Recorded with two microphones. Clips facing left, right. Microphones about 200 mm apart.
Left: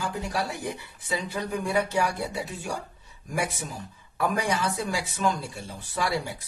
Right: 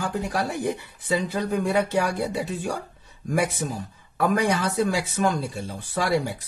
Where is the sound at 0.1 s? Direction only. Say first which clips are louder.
Right 4 dB; 55° right (ahead or behind).